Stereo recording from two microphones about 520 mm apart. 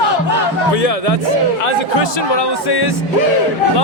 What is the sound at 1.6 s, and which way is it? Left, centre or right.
Speech, left.